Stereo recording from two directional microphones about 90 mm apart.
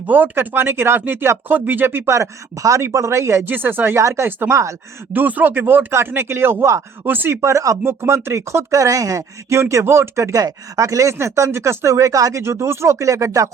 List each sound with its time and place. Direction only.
0.0 s speech: 20° right (ahead or behind)
7.0 s speech: 20° right (ahead or behind)
7.4 s speech: 35° right (ahead or behind)
12.4 s speech: 30° right (ahead or behind)